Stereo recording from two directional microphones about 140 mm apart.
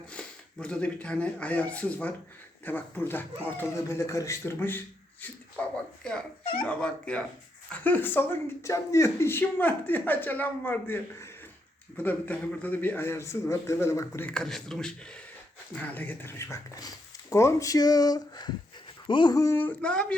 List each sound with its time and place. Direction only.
0.1 s speech: 10° left (ahead or behind)
14.3 s speech: 5° left (ahead or behind)